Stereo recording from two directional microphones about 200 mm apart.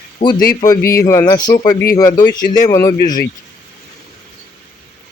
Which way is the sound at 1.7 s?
50° left (ahead or behind).